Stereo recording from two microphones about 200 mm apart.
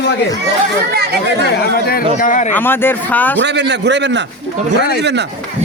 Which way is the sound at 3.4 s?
60° right (ahead or behind).